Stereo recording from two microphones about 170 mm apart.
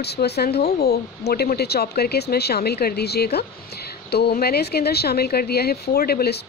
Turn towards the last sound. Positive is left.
turn(degrees=70)  # may be behind; listen again after turning